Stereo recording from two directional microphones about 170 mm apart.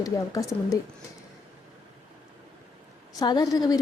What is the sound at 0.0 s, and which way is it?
Speech, 20° left (ahead or behind).